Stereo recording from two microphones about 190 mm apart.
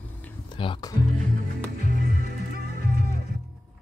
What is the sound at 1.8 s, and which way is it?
Music, 55° right (ahead or behind).